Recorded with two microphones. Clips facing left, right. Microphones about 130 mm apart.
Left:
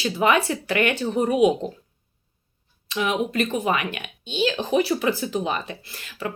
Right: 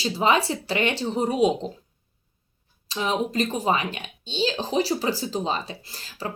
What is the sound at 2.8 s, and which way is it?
Speech, 30° right (ahead or behind).